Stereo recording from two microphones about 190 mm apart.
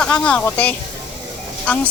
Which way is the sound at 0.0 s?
5° left (ahead or behind).